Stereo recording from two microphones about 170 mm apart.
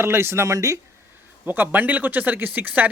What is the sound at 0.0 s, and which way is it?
Speech, 15° right (ahead or behind).